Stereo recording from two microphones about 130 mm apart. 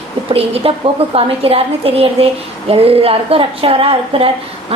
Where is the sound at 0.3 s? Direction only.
50° right (ahead or behind).